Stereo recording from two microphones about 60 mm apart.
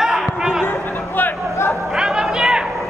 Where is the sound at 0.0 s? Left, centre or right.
Centre.